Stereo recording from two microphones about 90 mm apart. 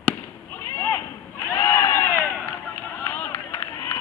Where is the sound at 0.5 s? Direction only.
20° left (ahead or behind).